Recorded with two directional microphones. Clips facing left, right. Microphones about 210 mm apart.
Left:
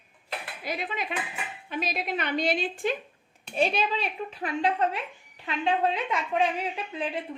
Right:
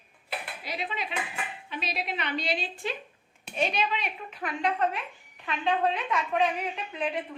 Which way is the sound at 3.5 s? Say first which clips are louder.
Left 3 dB; 35° left (ahead or behind).